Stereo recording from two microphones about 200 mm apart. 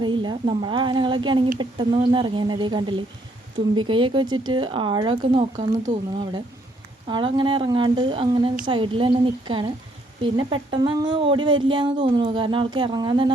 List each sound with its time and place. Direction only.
0.0 s speech: 25° right (ahead or behind)
5.5 s speech: 35° right (ahead or behind)
7.1 s speech: 25° right (ahead or behind)